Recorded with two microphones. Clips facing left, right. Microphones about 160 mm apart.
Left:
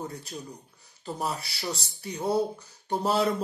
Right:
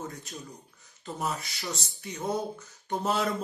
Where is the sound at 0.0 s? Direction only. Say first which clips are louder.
Left 3 dB; 35° left (ahead or behind).